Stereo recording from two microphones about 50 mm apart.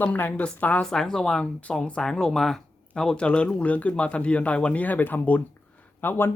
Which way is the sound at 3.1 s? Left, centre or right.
Left.